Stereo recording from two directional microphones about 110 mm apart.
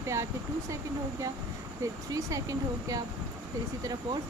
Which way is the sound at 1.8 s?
30° right (ahead or behind).